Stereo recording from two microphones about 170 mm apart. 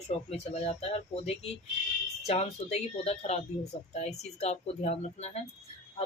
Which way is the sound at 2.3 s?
40° left (ahead or behind).